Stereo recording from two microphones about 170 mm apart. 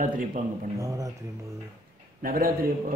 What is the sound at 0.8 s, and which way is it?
Speech, 20° right (ahead or behind).